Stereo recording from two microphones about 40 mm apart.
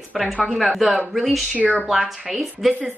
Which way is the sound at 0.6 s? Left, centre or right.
Centre.